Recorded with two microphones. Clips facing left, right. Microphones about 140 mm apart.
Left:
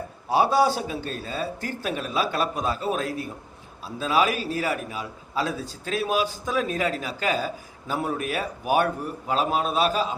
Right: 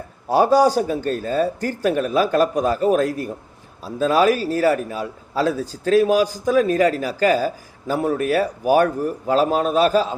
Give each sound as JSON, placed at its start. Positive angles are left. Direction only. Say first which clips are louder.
{"t": 0.3, "sound": "a man's voice", "louder": "right 5 dB", "side_deg": -45}